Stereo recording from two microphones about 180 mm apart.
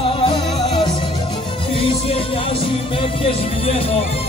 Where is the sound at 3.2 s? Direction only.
30° left (ahead or behind).